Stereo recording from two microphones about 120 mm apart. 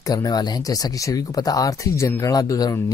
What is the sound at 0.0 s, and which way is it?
Speech, 30° left (ahead or behind).